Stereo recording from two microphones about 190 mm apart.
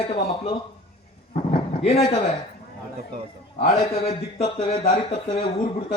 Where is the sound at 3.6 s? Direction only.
35° left (ahead or behind).